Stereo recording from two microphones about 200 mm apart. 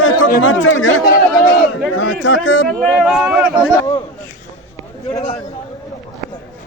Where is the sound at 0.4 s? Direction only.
75° left (ahead or behind).